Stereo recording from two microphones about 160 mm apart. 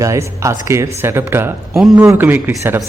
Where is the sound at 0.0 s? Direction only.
20° right (ahead or behind).